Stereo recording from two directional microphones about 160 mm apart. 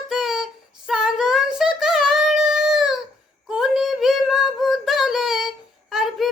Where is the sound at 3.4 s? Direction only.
Centre (ahead or behind).